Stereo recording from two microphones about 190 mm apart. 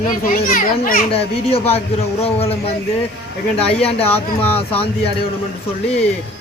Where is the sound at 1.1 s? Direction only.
30° left (ahead or behind).